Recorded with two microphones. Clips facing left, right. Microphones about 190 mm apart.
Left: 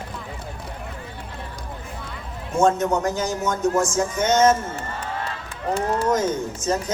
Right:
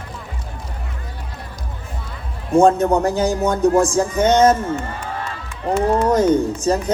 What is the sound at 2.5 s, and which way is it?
Speech, 30° right (ahead or behind).